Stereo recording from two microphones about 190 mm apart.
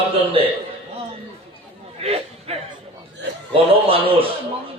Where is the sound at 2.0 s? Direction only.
35° right (ahead or behind).